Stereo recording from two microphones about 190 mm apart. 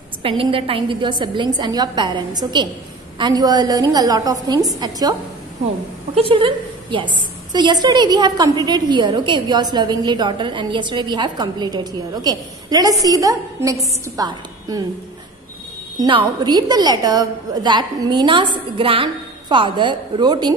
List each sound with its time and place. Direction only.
0.2 s a woman's voice: 30° right (ahead or behind)
6.1 s a woman's voice: 25° right (ahead or behind)
16.0 s a woman's voice: 25° right (ahead or behind)